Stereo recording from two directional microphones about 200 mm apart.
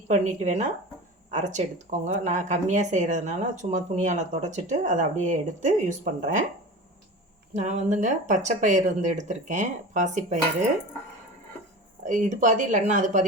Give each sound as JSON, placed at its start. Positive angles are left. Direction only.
{"t": 0.1, "sound": "speech", "side_deg": -35}
{"t": 7.5, "sound": "speech", "side_deg": -35}
{"t": 12.0, "sound": "speech", "side_deg": -40}